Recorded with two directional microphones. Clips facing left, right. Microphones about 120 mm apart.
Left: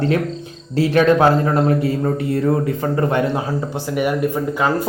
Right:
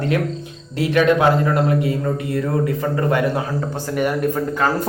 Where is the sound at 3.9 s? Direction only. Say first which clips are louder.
Left 1 dB; 10° left (ahead or behind).